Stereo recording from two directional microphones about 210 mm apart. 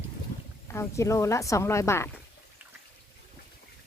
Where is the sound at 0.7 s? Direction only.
15° left (ahead or behind).